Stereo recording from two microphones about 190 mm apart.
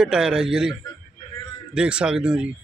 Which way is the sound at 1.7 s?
5° right (ahead or behind).